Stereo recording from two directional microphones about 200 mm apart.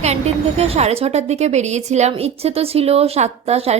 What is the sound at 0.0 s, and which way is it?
A woman's voice, 30° right (ahead or behind).